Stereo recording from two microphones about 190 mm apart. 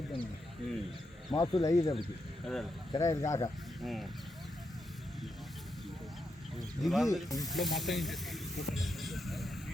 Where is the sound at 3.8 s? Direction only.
Centre (ahead or behind).